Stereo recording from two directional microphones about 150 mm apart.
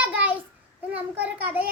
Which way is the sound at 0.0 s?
10° right (ahead or behind).